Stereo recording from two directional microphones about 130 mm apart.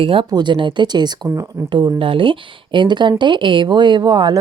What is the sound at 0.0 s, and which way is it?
Speech, 45° right (ahead or behind).